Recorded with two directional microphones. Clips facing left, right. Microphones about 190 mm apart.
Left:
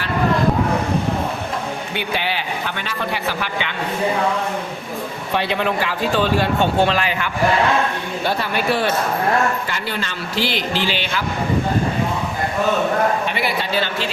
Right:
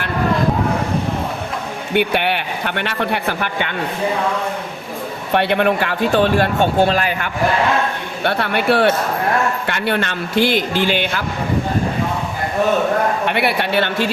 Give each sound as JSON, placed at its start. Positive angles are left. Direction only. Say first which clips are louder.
{"t": 1.9, "sound": "speech", "louder": "right 10 dB", "side_deg": -60}
{"t": 5.3, "sound": "speech", "louder": "right 5 dB", "side_deg": -60}
{"t": 8.2, "sound": "speech", "louder": "right 3 dB", "side_deg": -65}
{"t": 13.2, "sound": "speech", "louder": "right 4 dB", "side_deg": -65}